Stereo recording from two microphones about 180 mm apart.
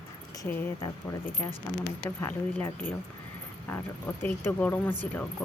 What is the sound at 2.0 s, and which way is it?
Speech, 15° left (ahead or behind).